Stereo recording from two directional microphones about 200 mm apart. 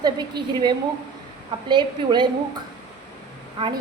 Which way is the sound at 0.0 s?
20° right (ahead or behind).